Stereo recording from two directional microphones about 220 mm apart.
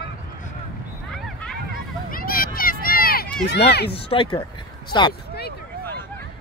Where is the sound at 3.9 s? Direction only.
25° left (ahead or behind).